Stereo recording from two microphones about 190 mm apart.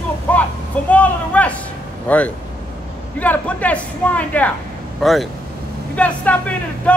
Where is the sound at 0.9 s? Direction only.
5° left (ahead or behind).